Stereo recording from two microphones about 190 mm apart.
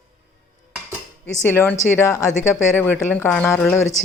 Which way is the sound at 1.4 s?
10° left (ahead or behind).